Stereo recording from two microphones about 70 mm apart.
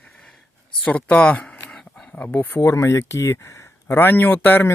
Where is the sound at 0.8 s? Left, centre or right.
Centre.